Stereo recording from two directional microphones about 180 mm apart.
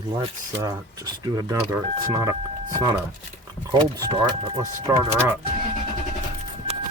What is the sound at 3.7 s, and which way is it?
Speech, 25° right (ahead or behind).